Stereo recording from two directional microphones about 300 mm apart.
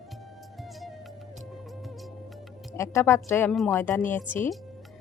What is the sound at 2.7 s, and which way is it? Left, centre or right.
Speech, centre.